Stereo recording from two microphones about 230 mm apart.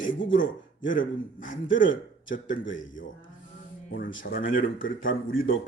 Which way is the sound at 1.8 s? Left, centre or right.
Left.